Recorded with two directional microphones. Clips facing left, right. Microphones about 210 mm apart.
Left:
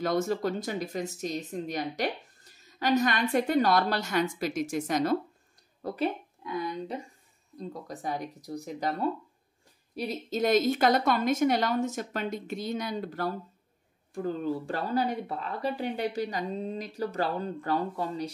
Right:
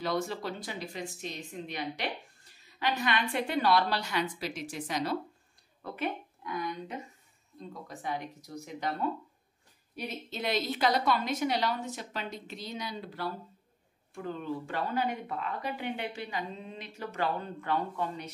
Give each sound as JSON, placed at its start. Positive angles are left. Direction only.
{"t": 0.0, "sound": "a woman's voice", "side_deg": 45}
{"t": 7.5, "sound": "speech", "side_deg": 40}